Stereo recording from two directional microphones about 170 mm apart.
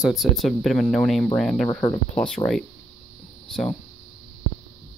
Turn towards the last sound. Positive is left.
turn(degrees=30)  # may be behind; listen again after turning